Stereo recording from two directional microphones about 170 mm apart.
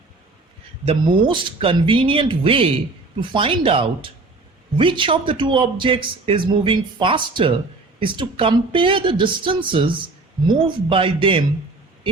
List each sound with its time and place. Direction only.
0.9 s a man's voice: 30° right (ahead or behind)